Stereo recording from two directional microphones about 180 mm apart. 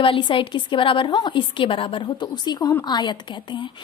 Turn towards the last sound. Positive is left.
turn(degrees=25)  # may be behind; listen again after turning